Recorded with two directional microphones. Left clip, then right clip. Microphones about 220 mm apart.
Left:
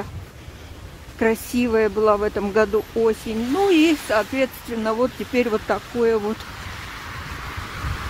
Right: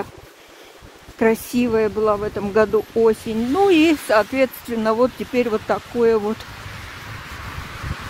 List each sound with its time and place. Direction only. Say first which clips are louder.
1.2 s speech: right 2 dB; 20° right (ahead or behind); by 2.5 s centre (ahead or behind)
2.5 s speech: right 4 dB; 15° right (ahead or behind)